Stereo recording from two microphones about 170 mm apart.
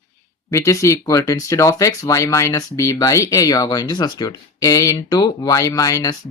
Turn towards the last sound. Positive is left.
turn(degrees=20)  # may be behind; listen again after turning